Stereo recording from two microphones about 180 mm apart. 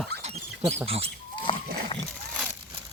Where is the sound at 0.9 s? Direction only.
35° right (ahead or behind).